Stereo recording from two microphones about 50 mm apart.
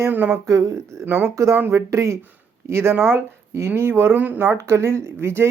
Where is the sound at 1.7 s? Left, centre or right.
Right.